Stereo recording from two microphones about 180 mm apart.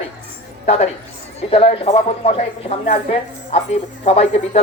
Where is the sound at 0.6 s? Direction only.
35° left (ahead or behind).